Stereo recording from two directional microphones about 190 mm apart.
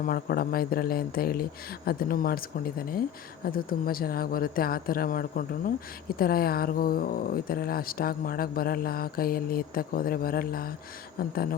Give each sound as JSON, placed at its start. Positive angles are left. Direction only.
{"t": 0.0, "sound": "speech", "side_deg": 50}